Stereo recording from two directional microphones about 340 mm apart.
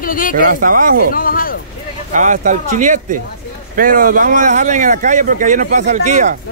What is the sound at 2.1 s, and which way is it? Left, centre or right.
Speech, right.